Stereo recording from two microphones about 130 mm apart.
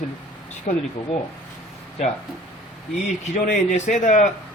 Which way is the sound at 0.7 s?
80° left.